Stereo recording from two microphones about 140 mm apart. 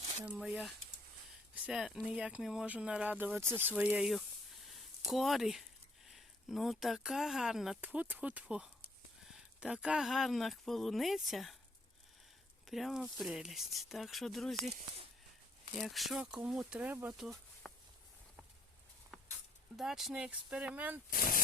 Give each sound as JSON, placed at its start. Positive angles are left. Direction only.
{"t": 0.3, "sound": "speech", "side_deg": -5}
{"t": 4.6, "sound": "a sound", "side_deg": 0}
{"t": 6.1, "sound": "speech", "side_deg": 0}
{"t": 12.6, "sound": "speech", "side_deg": 0}
{"t": 17.2, "sound": "a sound", "side_deg": 0}
{"t": 19.7, "sound": "speech", "side_deg": 0}
{"t": 21.1, "sound": "speech", "side_deg": 90}